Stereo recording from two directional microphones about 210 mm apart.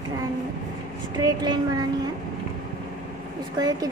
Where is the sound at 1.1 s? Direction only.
20° right (ahead or behind).